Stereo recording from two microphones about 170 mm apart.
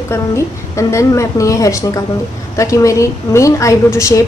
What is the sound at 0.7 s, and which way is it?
A woman's voice, 15° left (ahead or behind).